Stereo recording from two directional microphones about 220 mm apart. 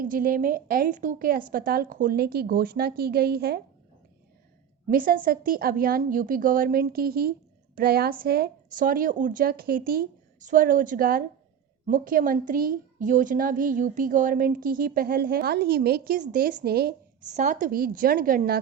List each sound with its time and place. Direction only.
0.0 s a woman's voice: 40° right (ahead or behind)
4.9 s a woman's voice: 40° right (ahead or behind)
17.3 s a woman's voice: 35° right (ahead or behind)